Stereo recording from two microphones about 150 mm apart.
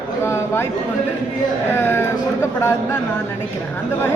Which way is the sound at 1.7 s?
15° left (ahead or behind).